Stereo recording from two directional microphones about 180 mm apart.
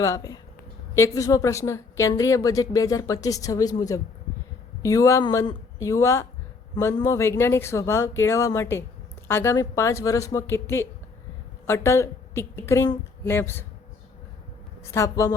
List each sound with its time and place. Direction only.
0.0 s a woman's voice: 20° left (ahead or behind)
14.9 s speech: 15° left (ahead or behind)